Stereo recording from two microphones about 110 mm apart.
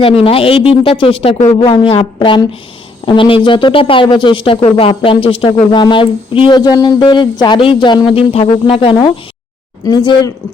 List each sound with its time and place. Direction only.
0.0 s speech: 60° left (ahead or behind); by 1.5 s 75° left (ahead or behind)
1.5 s speech: 50° left (ahead or behind)
2.1 s speech: 45° left (ahead or behind)
9.8 s speech: 40° left (ahead or behind)